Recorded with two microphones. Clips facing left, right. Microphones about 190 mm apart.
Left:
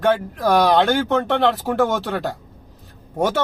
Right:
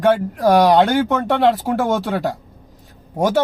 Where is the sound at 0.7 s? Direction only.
10° right (ahead or behind).